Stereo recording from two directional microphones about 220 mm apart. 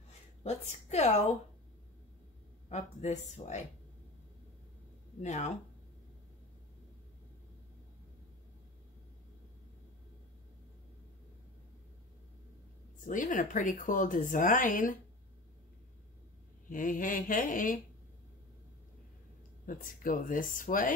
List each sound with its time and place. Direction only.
0.4 s a woman's voice: 30° left (ahead or behind)
2.7 s a woman's voice: 30° left (ahead or behind)
5.2 s a woman's voice: 30° left (ahead or behind)
13.0 s a woman's voice: 35° left (ahead or behind)
16.6 s a woman's voice: 40° left (ahead or behind)
19.6 s a woman's voice: 40° left (ahead or behind)